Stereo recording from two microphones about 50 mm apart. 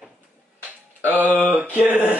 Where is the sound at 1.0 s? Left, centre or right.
Right.